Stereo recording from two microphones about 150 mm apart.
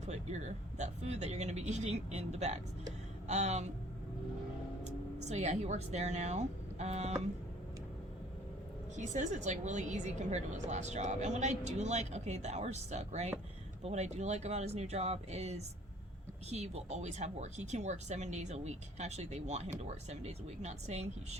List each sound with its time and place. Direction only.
0.1 s a woman's voice: 50° right (ahead or behind)
4.8 s speech: 45° right (ahead or behind)
9.0 s a woman's voice: 50° right (ahead or behind)